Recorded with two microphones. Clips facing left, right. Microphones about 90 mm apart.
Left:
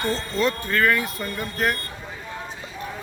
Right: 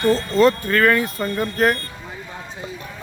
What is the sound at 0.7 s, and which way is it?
Speech, 60° right (ahead or behind).